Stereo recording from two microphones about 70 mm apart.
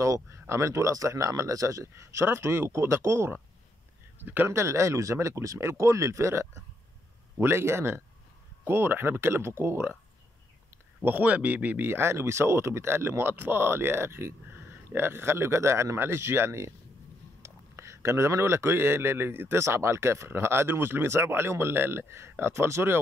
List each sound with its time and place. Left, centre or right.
0.0 s speech: right
4.2 s speech: right
4.5 s speech: right
11.0 s speech: right